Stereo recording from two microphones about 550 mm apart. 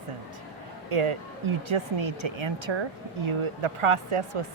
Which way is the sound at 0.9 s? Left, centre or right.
Right.